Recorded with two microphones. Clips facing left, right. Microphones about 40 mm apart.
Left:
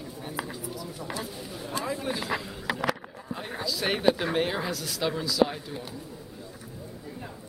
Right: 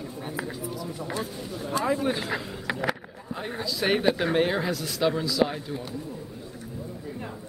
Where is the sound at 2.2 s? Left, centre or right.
Centre.